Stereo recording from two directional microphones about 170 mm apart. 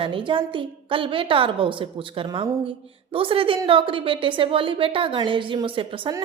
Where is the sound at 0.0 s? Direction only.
30° right (ahead or behind).